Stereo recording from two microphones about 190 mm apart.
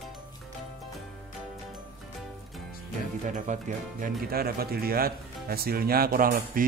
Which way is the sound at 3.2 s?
40° right (ahead or behind).